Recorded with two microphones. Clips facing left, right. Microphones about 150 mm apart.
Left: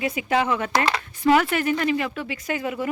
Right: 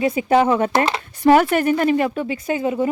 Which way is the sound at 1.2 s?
45° right (ahead or behind).